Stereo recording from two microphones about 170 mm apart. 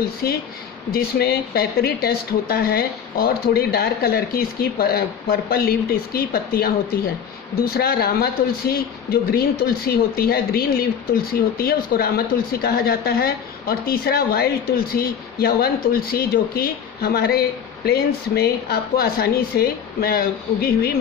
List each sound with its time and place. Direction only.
0.2 s speech: 65° left (ahead or behind)